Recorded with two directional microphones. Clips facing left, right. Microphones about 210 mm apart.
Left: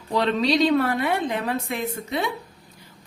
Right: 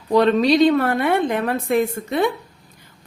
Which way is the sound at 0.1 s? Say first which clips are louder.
Right 6 dB; 50° right (ahead or behind).